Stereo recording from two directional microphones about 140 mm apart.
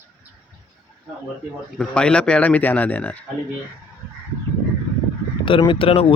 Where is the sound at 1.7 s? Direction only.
5° left (ahead or behind).